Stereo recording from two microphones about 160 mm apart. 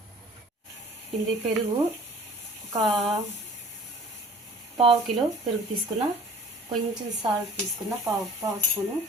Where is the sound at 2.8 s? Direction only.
Centre (ahead or behind).